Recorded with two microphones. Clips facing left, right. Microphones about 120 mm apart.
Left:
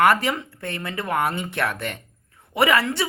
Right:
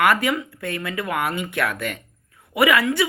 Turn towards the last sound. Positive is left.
turn(degrees=30)  # may be behind; listen again after turning